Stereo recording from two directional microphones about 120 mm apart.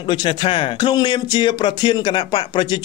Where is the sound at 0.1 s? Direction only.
40° left (ahead or behind).